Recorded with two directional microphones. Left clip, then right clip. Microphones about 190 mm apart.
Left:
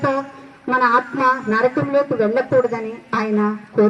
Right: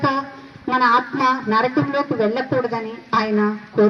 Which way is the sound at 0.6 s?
40° right (ahead or behind).